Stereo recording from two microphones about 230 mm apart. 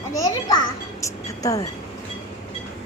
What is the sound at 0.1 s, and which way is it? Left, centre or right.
Music, centre.